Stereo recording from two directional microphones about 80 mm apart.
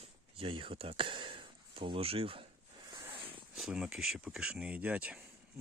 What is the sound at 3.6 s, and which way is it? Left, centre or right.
Speech, centre.